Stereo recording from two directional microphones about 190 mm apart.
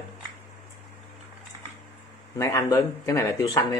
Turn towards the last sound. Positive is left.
turn(degrees=15)  # may be behind; listen again after turning